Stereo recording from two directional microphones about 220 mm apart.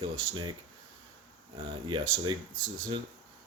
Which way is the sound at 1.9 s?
20° right (ahead or behind).